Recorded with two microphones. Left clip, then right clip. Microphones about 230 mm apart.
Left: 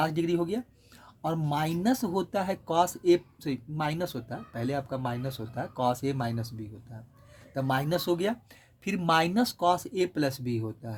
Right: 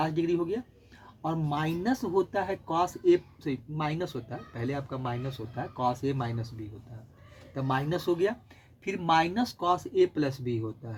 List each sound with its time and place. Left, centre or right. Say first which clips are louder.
0.0 s speech: left 1 dB; left
7.7 s speech: left 1 dB; left